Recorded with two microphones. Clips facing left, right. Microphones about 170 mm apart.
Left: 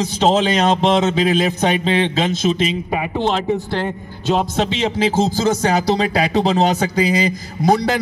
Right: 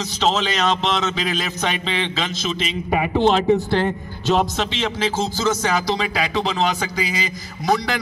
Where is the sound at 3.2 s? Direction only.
5° left (ahead or behind).